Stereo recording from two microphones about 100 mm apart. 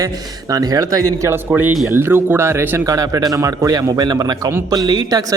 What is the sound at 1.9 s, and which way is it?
Speech, 20° right (ahead or behind).